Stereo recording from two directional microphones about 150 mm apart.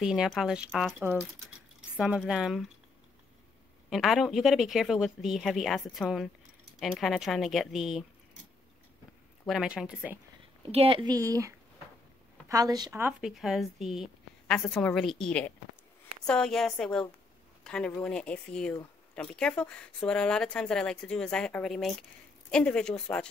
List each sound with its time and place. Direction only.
0.0 s speech: 5° right (ahead or behind)
3.9 s speech: centre (ahead or behind)
9.5 s speech: 5° right (ahead or behind)
10.7 s a woman's voice: 40° right (ahead or behind)
11.1 s speech: 20° right (ahead or behind)
13.2 s speech: centre (ahead or behind)